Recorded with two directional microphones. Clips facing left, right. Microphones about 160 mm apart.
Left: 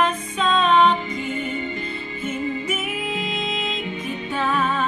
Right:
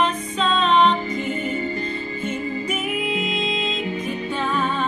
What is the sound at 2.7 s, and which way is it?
Music, centre (ahead or behind).